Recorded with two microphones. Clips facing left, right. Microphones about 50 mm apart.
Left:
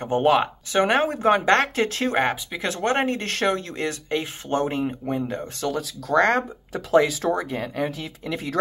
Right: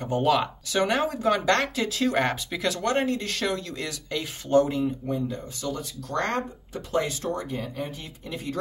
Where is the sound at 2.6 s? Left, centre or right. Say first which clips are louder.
Left 2 dB; left.